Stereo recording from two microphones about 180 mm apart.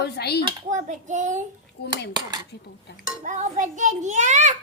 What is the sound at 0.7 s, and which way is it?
Speech, 40° right (ahead or behind).